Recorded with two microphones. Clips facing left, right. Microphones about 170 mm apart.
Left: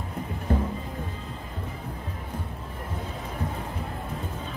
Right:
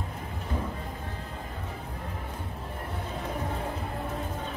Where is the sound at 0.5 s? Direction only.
60° left (ahead or behind).